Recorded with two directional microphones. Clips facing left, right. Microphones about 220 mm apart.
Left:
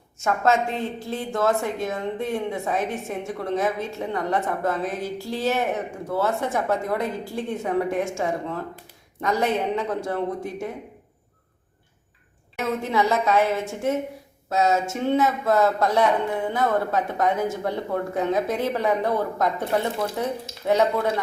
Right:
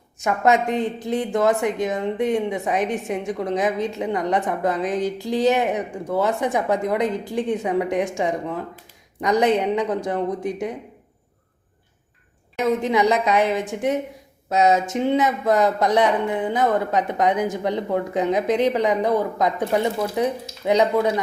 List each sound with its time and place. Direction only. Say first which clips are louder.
0.2 s a woman's voice: right 2 dB; 15° right (ahead or behind)
12.5 s a woman's voice: right 4 dB; 15° right (ahead or behind)